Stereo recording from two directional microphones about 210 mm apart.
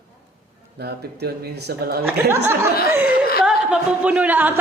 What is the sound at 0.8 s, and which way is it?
Speech, 50° right (ahead or behind).